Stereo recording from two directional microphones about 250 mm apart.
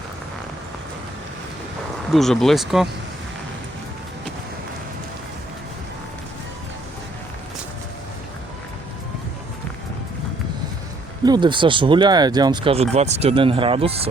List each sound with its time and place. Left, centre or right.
2.0 s speech: centre
11.3 s speech: centre